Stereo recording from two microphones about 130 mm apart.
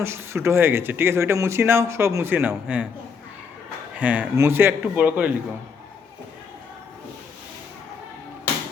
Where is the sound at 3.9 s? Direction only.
10° right (ahead or behind).